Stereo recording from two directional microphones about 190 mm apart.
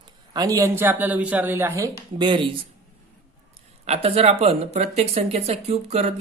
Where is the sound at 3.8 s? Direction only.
35° right (ahead or behind).